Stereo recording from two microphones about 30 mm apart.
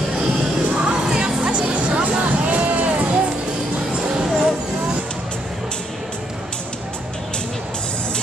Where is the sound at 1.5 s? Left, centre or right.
Right.